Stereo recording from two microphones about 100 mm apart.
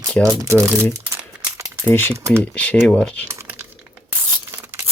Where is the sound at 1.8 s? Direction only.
20° left (ahead or behind).